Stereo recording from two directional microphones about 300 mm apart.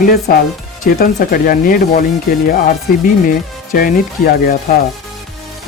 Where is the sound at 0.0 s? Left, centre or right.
Left.